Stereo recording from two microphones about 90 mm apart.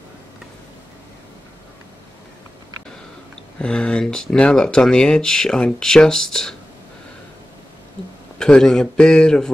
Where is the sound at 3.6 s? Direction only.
10° left (ahead or behind).